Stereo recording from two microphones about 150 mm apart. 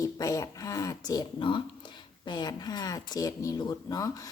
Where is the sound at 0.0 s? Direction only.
20° left (ahead or behind).